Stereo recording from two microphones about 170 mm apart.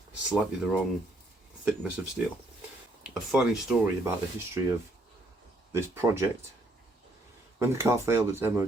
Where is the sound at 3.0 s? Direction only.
5° right (ahead or behind).